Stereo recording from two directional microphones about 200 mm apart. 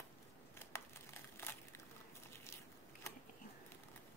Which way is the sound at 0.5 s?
10° left (ahead or behind).